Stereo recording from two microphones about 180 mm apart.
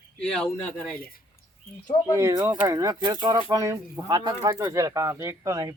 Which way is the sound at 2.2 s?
15° right (ahead or behind).